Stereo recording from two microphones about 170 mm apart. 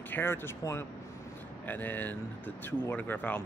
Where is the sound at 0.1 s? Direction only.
15° left (ahead or behind).